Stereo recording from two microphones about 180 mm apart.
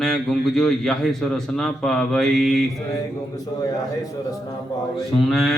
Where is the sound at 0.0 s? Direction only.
5° left (ahead or behind).